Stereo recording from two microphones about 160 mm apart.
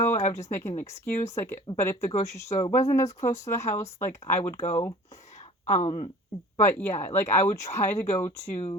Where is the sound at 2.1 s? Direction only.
40° left (ahead or behind).